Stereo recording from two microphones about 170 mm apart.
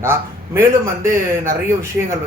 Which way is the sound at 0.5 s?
15° right (ahead or behind).